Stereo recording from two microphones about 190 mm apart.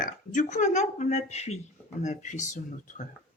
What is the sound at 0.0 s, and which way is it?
Speech, 40° left (ahead or behind).